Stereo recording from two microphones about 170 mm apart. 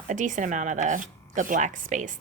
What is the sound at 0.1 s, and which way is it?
A woman's voice, 50° right (ahead or behind).